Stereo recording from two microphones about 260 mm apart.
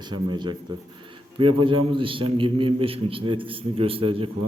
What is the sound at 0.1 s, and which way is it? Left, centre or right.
A man's voice, centre.